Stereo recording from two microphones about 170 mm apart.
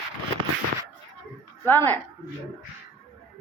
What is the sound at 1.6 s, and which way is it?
Speech, 10° left (ahead or behind).